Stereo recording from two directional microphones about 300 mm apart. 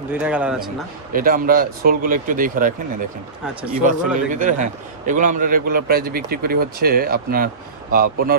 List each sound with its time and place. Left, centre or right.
0.1 s a man's voice: centre
1.1 s a man's voice: right
3.8 s a man's voice: right